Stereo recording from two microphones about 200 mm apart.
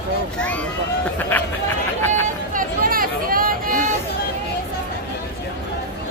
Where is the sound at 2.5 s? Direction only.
45° right (ahead or behind).